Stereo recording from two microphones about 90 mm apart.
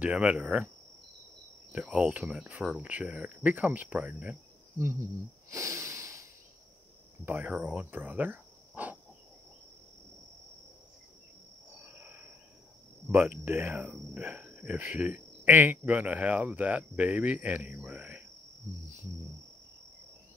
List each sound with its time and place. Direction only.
0.0 s speech: 15° right (ahead or behind)
1.7 s speech: 15° right (ahead or behind)
5.5 s a sound: 35° right (ahead or behind)
7.2 s speech: 20° right (ahead or behind)
12.0 s cricket: 20° right (ahead or behind)
13.1 s speech: 20° right (ahead or behind)